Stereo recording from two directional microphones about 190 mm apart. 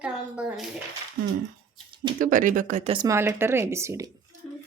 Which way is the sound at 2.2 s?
45° right (ahead or behind).